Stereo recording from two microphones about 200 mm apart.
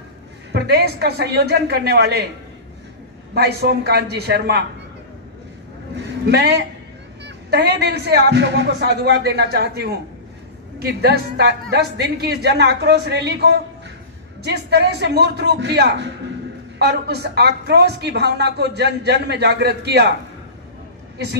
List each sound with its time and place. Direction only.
0.5 s a woman's voice: 55° right (ahead or behind)
3.3 s speech: 55° right (ahead or behind)
6.2 s a woman's voice: 55° right (ahead or behind)